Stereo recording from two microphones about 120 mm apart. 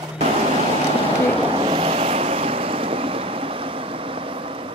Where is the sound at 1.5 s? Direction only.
50° right (ahead or behind).